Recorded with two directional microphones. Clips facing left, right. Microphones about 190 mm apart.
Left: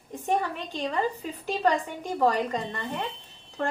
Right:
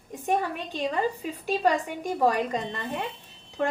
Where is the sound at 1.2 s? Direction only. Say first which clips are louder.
Right 1 dB; 10° right (ahead or behind).